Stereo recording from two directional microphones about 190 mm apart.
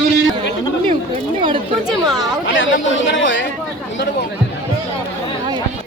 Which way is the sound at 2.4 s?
90° left.